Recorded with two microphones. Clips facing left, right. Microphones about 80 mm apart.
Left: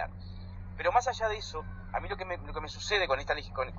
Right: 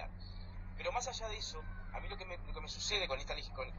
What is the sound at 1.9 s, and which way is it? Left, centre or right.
A man's voice, left.